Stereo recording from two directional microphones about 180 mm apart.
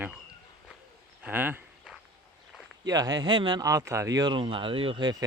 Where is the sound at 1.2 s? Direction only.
10° right (ahead or behind).